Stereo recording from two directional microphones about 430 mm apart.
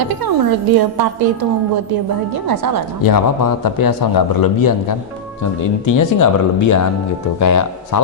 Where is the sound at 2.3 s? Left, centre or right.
Right.